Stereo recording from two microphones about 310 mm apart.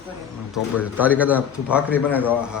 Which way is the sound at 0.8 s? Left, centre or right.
Centre.